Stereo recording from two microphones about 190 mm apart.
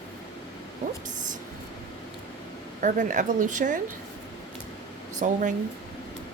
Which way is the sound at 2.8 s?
40° right (ahead or behind).